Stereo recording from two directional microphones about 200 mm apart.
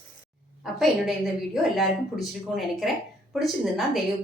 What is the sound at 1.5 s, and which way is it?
A woman's voice, centre (ahead or behind).